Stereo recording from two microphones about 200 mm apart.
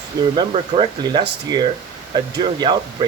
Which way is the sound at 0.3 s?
25° right (ahead or behind).